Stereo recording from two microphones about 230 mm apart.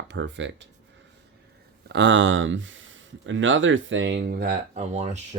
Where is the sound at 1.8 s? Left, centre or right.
Right.